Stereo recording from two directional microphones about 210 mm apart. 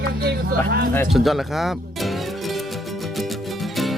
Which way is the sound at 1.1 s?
Centre (ahead or behind).